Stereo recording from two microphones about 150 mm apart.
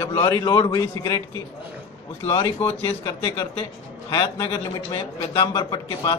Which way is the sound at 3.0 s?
35° left (ahead or behind).